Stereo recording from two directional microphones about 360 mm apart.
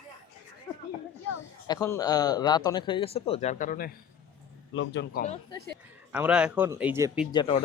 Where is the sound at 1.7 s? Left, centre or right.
Centre.